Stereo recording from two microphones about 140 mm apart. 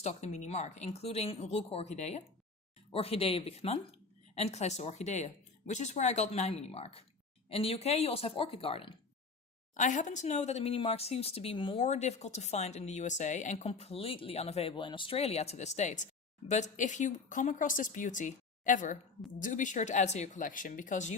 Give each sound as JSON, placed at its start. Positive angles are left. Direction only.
{"t": 0.0, "sound": "speech", "side_deg": 50}
{"t": 9.7, "sound": "speech", "side_deg": 65}
{"t": 11.8, "sound": "speech", "side_deg": 55}